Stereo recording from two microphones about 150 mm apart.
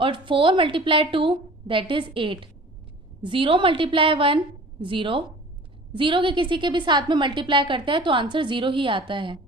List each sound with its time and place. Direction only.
0.0 s a woman's voice: 35° right (ahead or behind)